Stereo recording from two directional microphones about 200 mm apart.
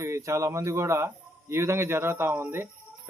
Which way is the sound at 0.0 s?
15° right (ahead or behind).